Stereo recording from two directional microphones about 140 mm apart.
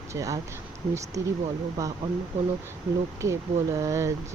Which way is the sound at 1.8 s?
20° right (ahead or behind).